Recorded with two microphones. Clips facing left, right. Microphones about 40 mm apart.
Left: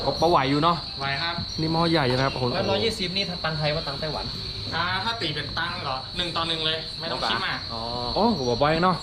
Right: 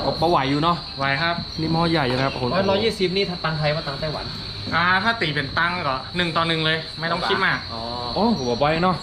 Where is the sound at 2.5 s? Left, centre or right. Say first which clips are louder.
Right 4 dB; centre.